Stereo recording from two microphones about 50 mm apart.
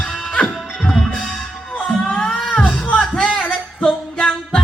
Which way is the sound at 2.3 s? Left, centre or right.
Centre.